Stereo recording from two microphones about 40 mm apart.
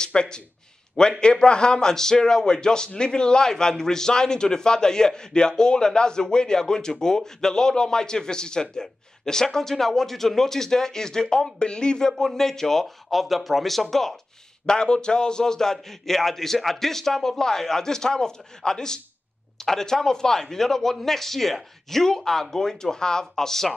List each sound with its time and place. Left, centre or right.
0.0 s a man's voice: left
12.1 s speech: centre
14.7 s a man's voice: left